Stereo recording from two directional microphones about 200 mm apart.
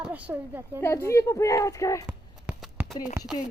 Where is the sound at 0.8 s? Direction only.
10° left (ahead or behind).